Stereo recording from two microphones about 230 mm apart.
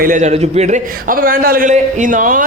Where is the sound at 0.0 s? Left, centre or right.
Right.